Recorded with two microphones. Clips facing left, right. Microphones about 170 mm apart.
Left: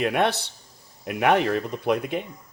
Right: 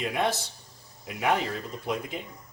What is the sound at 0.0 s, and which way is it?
Speech, 65° left (ahead or behind).